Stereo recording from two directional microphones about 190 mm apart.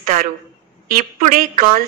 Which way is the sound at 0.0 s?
45° right (ahead or behind).